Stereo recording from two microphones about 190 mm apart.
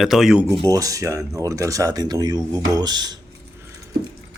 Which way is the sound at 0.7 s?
20° right (ahead or behind).